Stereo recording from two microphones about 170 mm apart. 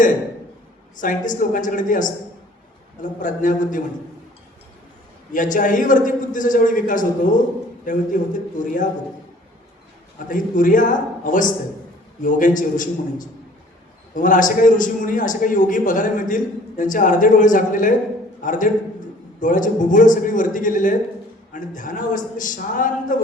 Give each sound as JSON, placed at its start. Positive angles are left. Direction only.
{"t": 1.0, "sound": "a man's voice", "side_deg": 50}
{"t": 5.3, "sound": "a man's voice", "side_deg": 50}
{"t": 10.2, "sound": "a man's voice", "side_deg": 50}